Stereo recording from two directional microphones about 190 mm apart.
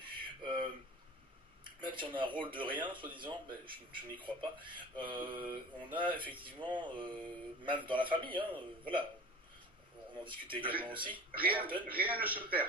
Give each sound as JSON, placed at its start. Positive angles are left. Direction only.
{"t": 0.0, "sound": "a sound", "side_deg": -25}
{"t": 1.6, "sound": "speech", "side_deg": -25}
{"t": 10.2, "sound": "speech", "side_deg": -25}
{"t": 11.3, "sound": "a man's voice", "side_deg": -10}